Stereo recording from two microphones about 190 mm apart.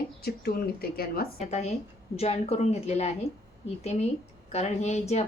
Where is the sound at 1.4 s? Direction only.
35° left (ahead or behind).